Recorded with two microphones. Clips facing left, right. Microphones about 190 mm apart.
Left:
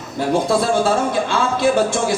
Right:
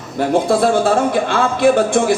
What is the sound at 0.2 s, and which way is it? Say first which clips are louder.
Speech: right 3 dB; 55° right (ahead or behind).